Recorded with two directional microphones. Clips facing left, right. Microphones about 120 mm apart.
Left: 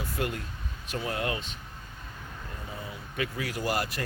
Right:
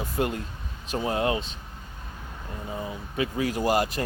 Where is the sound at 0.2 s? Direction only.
25° right (ahead or behind).